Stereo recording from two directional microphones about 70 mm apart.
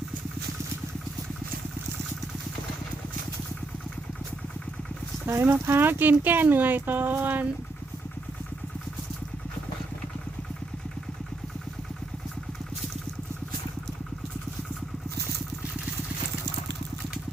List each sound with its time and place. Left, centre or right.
5.4 s speech: right